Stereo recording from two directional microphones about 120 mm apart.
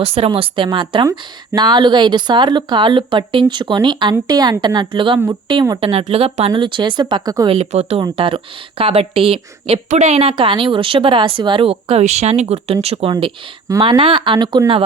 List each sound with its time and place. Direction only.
0.0 s a woman's voice: 55° right (ahead or behind); by 5.8 s 35° right (ahead or behind)
5.8 s a woman's voice: 55° right (ahead or behind)
6.5 s speech: 45° right (ahead or behind)
7.5 s a woman's voice: 65° right (ahead or behind)
8.0 s a woman's voice: 45° right (ahead or behind)
13.1 s a woman's voice: 45° right (ahead or behind)